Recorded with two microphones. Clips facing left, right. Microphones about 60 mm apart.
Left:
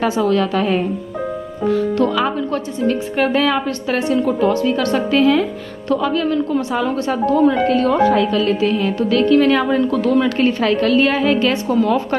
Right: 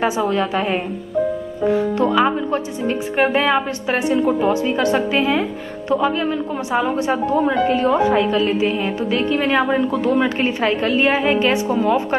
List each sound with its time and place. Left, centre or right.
0.0 s a woman's voice: centre